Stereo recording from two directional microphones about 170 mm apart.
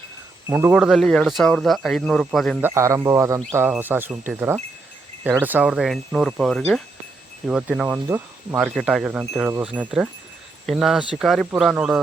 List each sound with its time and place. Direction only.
0.4 s speech: 15° right (ahead or behind)
2.6 s speech: 15° right (ahead or behind)
8.7 s speech: centre (ahead or behind)